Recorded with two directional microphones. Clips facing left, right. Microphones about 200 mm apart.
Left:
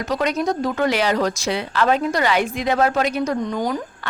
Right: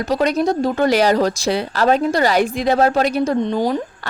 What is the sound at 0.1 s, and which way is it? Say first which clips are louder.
Speech: right 4 dB; 35° right (ahead or behind).